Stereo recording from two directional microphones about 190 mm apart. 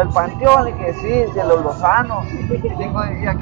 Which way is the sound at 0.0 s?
15° left (ahead or behind).